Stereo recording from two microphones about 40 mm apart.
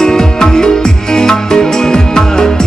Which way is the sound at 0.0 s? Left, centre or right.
Centre.